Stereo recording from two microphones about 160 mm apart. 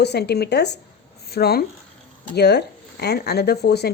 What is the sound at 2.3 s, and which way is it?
A woman's voice, 90° left.